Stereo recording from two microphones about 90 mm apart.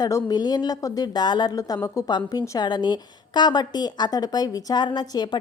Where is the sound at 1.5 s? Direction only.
40° left (ahead or behind).